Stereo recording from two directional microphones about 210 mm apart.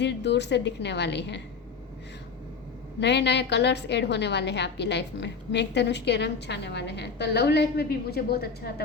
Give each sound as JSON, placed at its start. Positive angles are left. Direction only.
{"t": 0.0, "sound": "a woman's voice", "side_deg": 55}
{"t": 3.0, "sound": "a woman's voice", "side_deg": 55}